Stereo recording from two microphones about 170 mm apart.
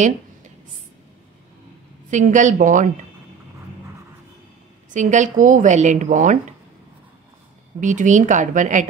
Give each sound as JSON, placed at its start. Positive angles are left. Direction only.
{"t": 2.0, "sound": "speech", "side_deg": -45}
{"t": 4.9, "sound": "speech", "side_deg": -45}
{"t": 7.8, "sound": "speech", "side_deg": -45}